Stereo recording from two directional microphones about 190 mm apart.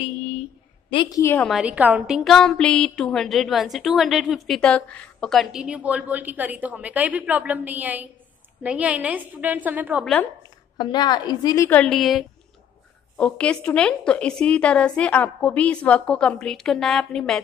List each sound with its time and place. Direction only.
0.8 s a woman's voice: 25° left (ahead or behind)
1.2 s a woman's voice: 10° left (ahead or behind)
1.5 s a woman's voice: 5° right (ahead or behind)
10.8 s a woman's voice: 20° left (ahead or behind); by 17.4 s 5° left (ahead or behind)